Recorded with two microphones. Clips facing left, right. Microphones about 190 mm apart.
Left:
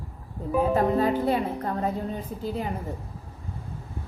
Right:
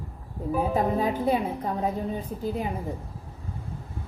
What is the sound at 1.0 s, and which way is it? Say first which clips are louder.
A woman's voice: left 1 dB; 5° right (ahead or behind).